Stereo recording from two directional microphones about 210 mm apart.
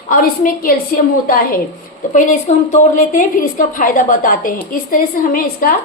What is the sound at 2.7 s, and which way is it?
A woman's voice, 40° left (ahead or behind).